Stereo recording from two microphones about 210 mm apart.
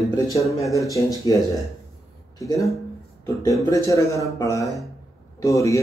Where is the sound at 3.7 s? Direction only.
15° left (ahead or behind).